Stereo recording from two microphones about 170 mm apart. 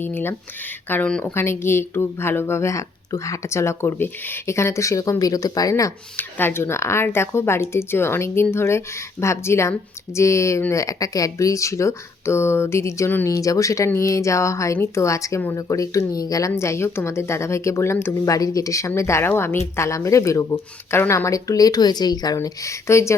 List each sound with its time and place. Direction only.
0.0 s speech: 10° left (ahead or behind)